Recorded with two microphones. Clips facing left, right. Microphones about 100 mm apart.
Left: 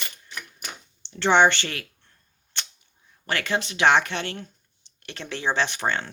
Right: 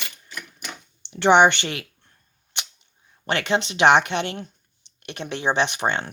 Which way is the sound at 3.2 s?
20° right (ahead or behind).